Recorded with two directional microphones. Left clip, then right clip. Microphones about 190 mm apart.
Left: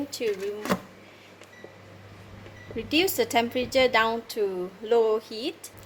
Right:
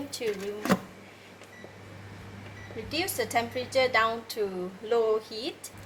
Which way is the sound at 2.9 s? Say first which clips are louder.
Left 5 dB; 55° left (ahead or behind).